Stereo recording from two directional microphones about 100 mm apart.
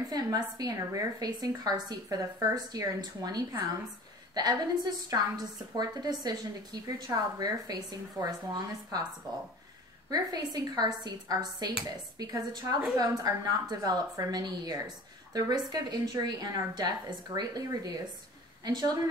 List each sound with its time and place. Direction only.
0.0 s a woman's voice: 40° right (ahead or behind)
10.0 s a woman's voice: 40° right (ahead or behind)